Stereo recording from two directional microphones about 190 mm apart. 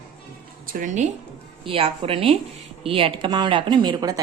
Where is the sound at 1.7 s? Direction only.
30° right (ahead or behind).